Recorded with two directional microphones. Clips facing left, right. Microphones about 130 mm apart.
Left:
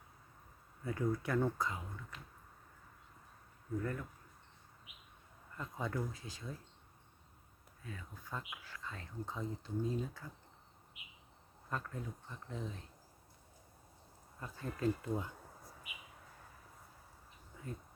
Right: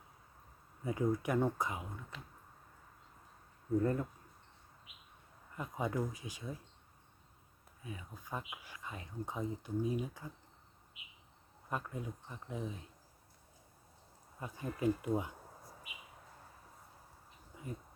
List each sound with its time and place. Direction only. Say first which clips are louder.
0.9 s speech: right 3 dB; 20° right (ahead or behind)
3.8 s speech: right 7 dB; 30° right (ahead or behind)
5.5 s speech: right 3 dB; 15° right (ahead or behind)
7.8 s speech: right 2 dB; 15° right (ahead or behind)
11.7 s speech: right 2 dB; 15° right (ahead or behind)
14.3 s speech: right 2 dB; 15° right (ahead or behind)
17.5 s a sound: right 2 dB; 15° right (ahead or behind)